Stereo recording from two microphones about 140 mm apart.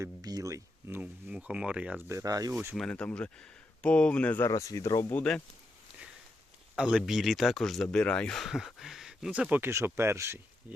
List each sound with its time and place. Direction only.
0.0 s speech: 25° right (ahead or behind); by 2.0 s 10° right (ahead or behind)
2.0 s speech: 25° right (ahead or behind)
2.7 s speech: 5° left (ahead or behind); by 5.2 s 20° left (ahead or behind)
6.7 s speech: 5° right (ahead or behind)